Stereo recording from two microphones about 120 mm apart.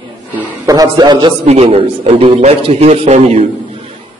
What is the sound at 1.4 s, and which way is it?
A man's voice, 60° right (ahead or behind).